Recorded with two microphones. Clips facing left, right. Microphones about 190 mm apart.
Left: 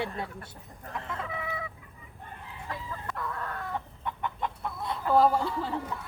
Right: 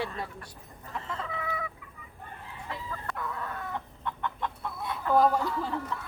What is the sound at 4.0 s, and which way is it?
Fowl, 15° left (ahead or behind).